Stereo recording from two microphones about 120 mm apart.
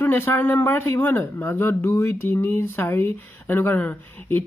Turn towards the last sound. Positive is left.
turn(degrees=15)  # may be behind; listen again after turning